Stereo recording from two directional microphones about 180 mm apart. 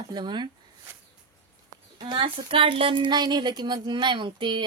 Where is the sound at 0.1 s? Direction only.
25° right (ahead or behind).